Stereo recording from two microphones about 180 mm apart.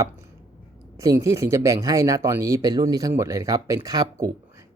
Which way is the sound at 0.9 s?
20° right (ahead or behind).